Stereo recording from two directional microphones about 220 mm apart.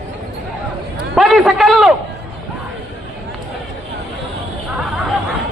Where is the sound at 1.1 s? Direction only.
Centre (ahead or behind).